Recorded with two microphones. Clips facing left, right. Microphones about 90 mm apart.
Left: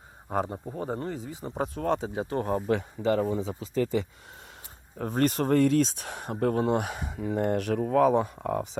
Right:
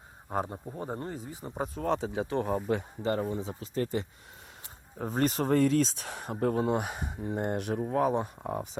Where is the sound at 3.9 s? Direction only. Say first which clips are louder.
Left 4 dB; 70° left (ahead or behind).